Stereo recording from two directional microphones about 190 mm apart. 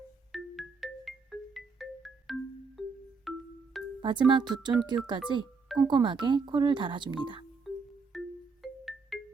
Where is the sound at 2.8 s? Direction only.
Centre (ahead or behind).